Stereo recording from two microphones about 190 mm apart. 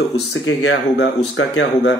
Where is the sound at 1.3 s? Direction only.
90° left.